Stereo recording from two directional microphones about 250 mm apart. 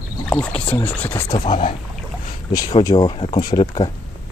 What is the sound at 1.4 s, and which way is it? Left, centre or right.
Speech, left.